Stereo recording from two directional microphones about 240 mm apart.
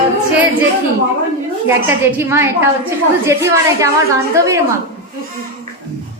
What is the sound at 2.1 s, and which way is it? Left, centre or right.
A child's voice, centre.